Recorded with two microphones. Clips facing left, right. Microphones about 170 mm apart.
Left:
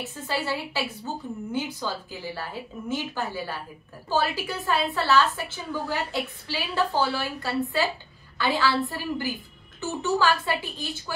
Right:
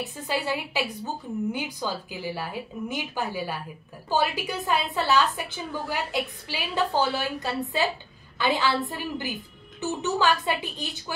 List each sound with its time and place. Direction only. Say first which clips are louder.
0.3 s a woman's voice: right 1 dB; 15° right (ahead or behind)